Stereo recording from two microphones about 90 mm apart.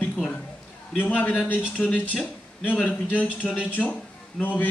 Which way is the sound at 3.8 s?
15° left (ahead or behind).